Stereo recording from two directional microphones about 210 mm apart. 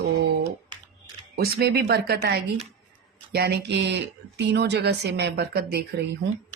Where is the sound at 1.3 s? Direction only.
50° right (ahead or behind).